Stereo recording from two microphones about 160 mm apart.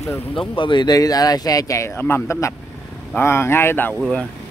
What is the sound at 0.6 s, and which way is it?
Speech, 30° left (ahead or behind).